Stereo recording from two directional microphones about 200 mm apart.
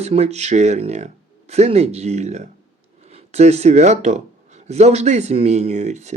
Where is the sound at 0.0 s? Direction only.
30° right (ahead or behind).